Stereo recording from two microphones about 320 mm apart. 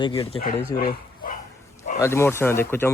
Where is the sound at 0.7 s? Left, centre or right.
Left.